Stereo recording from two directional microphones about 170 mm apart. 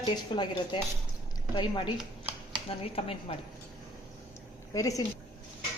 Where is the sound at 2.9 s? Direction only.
35° left (ahead or behind).